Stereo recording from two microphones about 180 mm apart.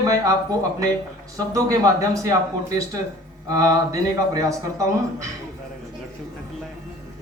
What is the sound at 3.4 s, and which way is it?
Speech, 20° right (ahead or behind).